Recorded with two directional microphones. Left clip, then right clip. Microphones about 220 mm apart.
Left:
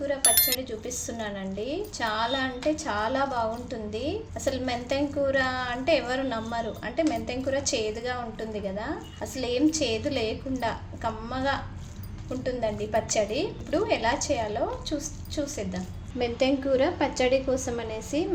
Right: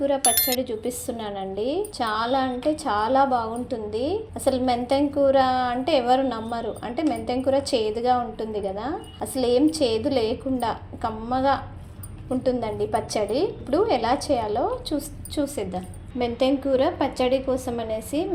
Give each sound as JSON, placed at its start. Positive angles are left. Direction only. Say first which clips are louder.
{"t": 0.2, "sound": "speech", "louder": "right 3 dB", "side_deg": 0}
{"t": 0.6, "sound": "a woman's voice", "louder": "right 6 dB", "side_deg": -20}
{"t": 16.1, "sound": "a woman's voice", "louder": "right 3 dB", "side_deg": -10}